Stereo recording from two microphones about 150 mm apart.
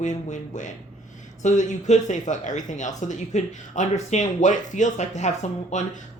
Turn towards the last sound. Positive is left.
turn(degrees=50)  # may be behind; listen again after turning